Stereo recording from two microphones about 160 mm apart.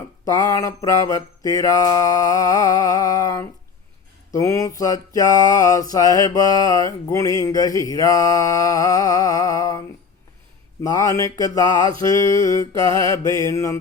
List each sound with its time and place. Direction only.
0.3 s mantra: 20° left (ahead or behind)
10.8 s mantra: 20° left (ahead or behind)
12.9 s mantra: 30° right (ahead or behind)
13.3 s mantra: 20° left (ahead or behind)